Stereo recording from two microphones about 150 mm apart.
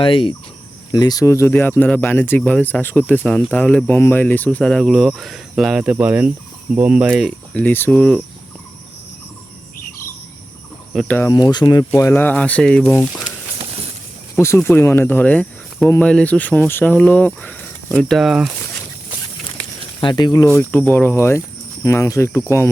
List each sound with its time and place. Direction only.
0.0 s speech: 35° left (ahead or behind); by 7.3 s centre (ahead or behind)
7.5 s speech: 10° left (ahead or behind)
10.9 s speech: centre (ahead or behind)
11.3 s speech: 30° left (ahead or behind)
11.9 s speech: 15° left (ahead or behind)
14.3 s speech: 15° left (ahead or behind); by 18.5 s 5° right (ahead or behind)
20.0 s speech: 30° left (ahead or behind)